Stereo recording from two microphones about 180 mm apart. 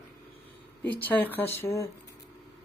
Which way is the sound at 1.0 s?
10° left (ahead or behind).